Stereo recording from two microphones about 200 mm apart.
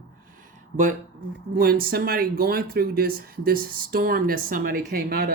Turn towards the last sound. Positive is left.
turn(degrees=-45)  # may be behind; listen again after turning